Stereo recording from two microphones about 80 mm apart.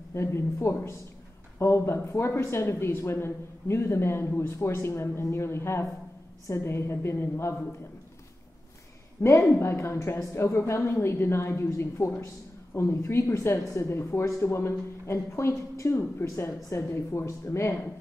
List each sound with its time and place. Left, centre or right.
0.1 s speech: left
9.2 s speech: left